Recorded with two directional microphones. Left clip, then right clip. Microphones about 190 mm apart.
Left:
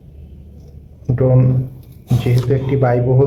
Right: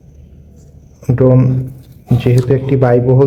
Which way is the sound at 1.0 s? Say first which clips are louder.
Right 5 dB; 45° right (ahead or behind).